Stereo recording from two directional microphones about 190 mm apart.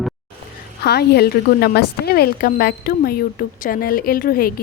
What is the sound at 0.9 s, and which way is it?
A woman's voice, 55° left (ahead or behind).